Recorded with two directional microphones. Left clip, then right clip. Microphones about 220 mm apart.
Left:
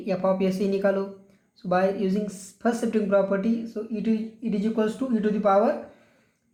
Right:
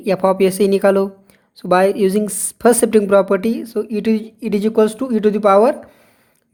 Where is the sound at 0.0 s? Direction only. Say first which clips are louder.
Right 10 dB; 50° right (ahead or behind).